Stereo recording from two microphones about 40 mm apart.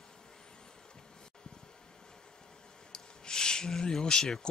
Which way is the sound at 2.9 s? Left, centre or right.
Centre.